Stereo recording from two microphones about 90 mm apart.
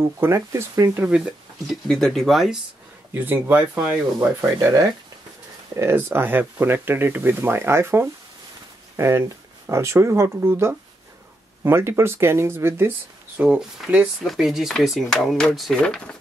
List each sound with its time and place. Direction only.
0.2 s speech: 30° right (ahead or behind)
0.9 s speech: 15° right (ahead or behind)
1.7 s speech: 5° left (ahead or behind)
3.2 s speech: 20° right (ahead or behind)
4.4 s speech: 30° right (ahead or behind)
13.4 s speech: 15° right (ahead or behind)
14.2 s speech: centre (ahead or behind)